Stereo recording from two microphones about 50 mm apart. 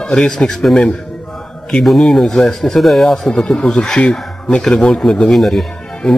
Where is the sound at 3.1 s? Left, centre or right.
Centre.